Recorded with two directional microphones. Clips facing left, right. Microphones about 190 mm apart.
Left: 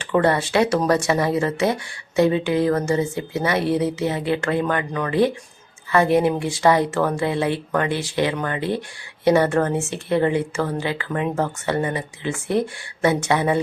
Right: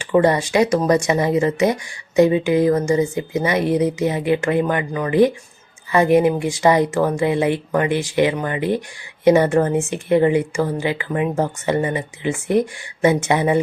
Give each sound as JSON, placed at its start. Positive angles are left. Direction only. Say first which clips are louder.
{"t": 0.0, "sound": "speech", "louder": "right 3 dB", "side_deg": -15}